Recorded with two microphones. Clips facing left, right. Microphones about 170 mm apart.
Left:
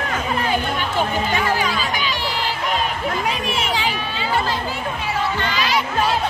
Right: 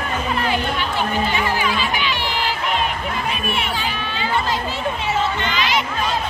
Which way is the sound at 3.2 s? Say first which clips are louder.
Left 1 dB; 90° left.